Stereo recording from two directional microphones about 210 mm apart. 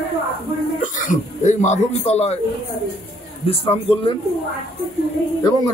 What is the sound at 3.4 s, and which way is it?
Speech, 25° left (ahead or behind).